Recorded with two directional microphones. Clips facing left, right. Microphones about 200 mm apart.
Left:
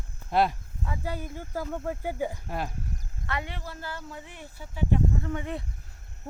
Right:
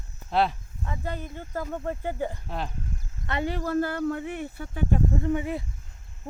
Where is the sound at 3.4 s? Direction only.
45° right (ahead or behind).